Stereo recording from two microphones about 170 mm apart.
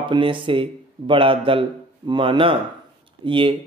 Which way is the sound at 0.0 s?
30° right (ahead or behind).